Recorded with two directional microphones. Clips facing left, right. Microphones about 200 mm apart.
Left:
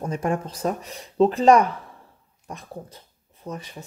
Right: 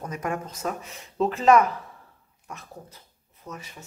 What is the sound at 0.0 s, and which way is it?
Speech, 30° left (ahead or behind).